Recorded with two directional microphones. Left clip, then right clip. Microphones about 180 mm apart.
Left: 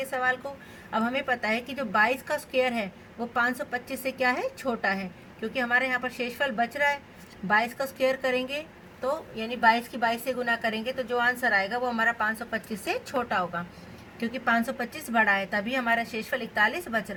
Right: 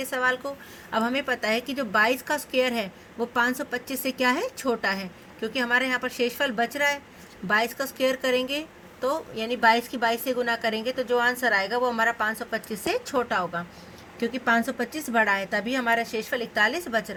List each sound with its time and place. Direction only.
0.0 s a woman's voice: 55° right (ahead or behind)